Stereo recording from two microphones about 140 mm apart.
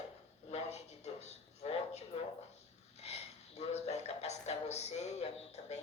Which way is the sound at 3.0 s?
50° left (ahead or behind).